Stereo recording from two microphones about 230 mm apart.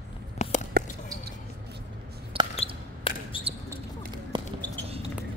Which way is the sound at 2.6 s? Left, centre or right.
Left.